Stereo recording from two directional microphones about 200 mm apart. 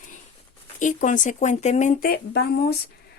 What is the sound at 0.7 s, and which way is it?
A woman's voice, 40° left (ahead or behind).